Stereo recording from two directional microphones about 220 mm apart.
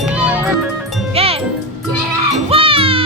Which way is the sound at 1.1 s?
25° right (ahead or behind).